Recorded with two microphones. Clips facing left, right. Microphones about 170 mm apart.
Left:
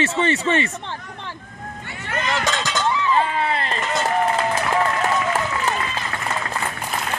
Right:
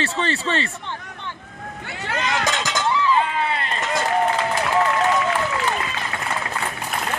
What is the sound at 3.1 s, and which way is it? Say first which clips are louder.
Run: left 1 dB; 35° left (ahead or behind).